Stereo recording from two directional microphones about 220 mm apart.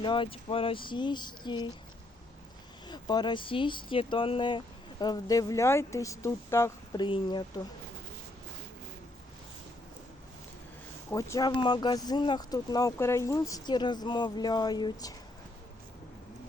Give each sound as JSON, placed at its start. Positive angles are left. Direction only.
{"t": 0.0, "sound": "speech", "side_deg": 20}
{"t": 2.8, "sound": "speech", "side_deg": 20}
{"t": 11.1, "sound": "speech", "side_deg": 15}